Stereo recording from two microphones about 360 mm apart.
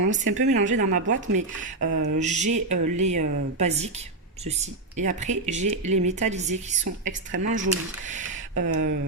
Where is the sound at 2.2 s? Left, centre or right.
Centre.